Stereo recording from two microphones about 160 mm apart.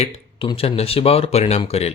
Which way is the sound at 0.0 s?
35° left (ahead or behind).